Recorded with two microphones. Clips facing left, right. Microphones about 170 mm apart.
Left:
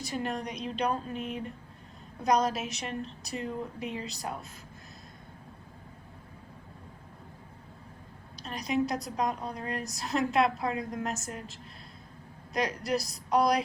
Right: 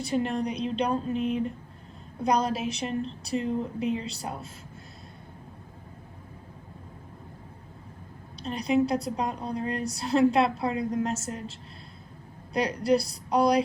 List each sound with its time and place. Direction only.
0.1 s a woman's voice: 30° right (ahead or behind)
8.4 s a woman's voice: 30° right (ahead or behind)
12.5 s a woman's voice: 30° right (ahead or behind)